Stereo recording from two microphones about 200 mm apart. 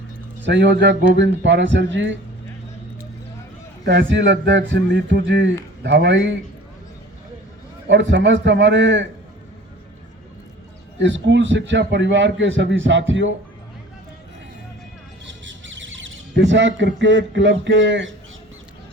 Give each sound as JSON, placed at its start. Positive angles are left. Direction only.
{"t": 0.4, "sound": "a man's voice", "side_deg": -65}
{"t": 3.8, "sound": "a man's voice", "side_deg": -60}
{"t": 7.9, "sound": "a man's voice", "side_deg": -65}
{"t": 11.0, "sound": "a man's voice", "side_deg": -65}
{"t": 15.4, "sound": "speech", "side_deg": -70}